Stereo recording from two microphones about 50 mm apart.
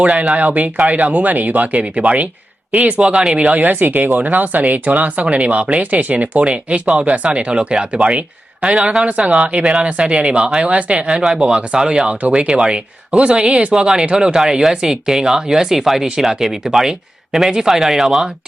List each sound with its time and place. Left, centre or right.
0.0 s speech: right; by 18.3 s centre